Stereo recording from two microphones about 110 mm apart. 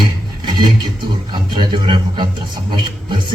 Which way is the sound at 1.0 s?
45° right (ahead or behind).